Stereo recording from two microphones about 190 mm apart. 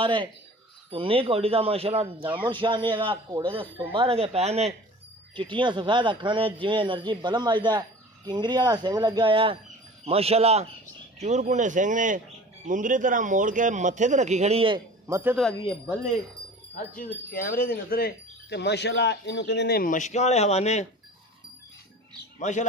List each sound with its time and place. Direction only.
0.0 s a man's voice: 25° right (ahead or behind)
15.0 s speech: 15° right (ahead or behind)
16.7 s speech: 50° left (ahead or behind)
22.4 s speech: 40° left (ahead or behind)